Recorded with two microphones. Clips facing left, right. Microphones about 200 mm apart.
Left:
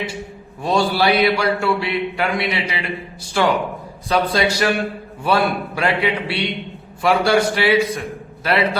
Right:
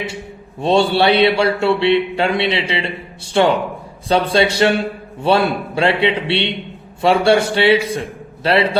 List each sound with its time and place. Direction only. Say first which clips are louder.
0.6 s speech: right 4 dB; 25° right (ahead or behind)